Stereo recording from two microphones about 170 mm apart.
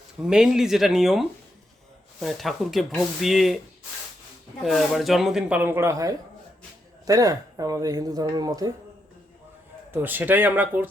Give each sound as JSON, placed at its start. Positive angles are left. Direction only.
{"t": 0.2, "sound": "a man's voice", "side_deg": -5}
{"t": 4.6, "sound": "a man's voice", "side_deg": 0}
{"t": 9.9, "sound": "speech", "side_deg": -10}